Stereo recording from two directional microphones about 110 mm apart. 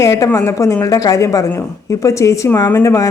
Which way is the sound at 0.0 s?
30° left (ahead or behind).